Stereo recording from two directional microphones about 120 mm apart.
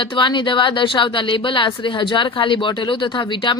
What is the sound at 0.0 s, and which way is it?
Speech, 40° left (ahead or behind).